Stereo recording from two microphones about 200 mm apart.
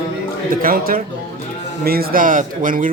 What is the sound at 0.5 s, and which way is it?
Speech, 45° right (ahead or behind).